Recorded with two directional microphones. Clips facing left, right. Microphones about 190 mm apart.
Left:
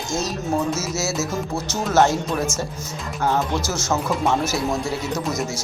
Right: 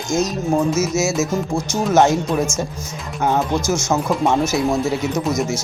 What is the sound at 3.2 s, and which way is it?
Speech, 15° right (ahead or behind).